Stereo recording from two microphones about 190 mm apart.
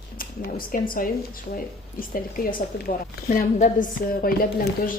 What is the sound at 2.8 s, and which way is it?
A woman's voice, 45° left (ahead or behind).